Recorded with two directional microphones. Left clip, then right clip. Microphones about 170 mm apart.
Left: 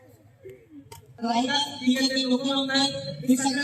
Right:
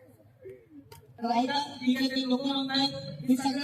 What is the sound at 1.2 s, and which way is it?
Speech, 35° right (ahead or behind).